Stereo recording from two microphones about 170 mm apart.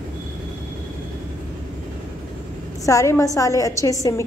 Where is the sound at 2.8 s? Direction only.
20° left (ahead or behind).